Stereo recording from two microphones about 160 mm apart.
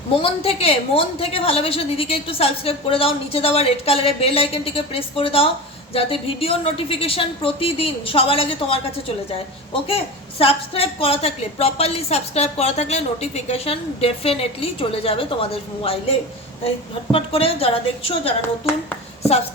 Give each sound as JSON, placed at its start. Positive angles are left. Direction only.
{"t": 0.2, "sound": "a woman's voice", "side_deg": 40}